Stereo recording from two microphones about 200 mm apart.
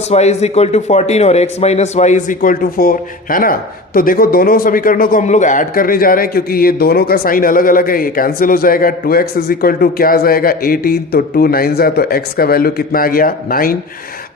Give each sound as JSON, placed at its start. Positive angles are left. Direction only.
{"t": 0.1, "sound": "a man's voice", "side_deg": 35}